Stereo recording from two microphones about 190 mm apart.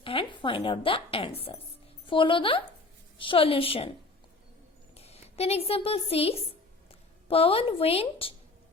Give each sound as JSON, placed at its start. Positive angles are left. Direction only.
{"t": 0.0, "sound": "a woman's voice", "side_deg": 30}
{"t": 4.9, "sound": "a woman's voice", "side_deg": 35}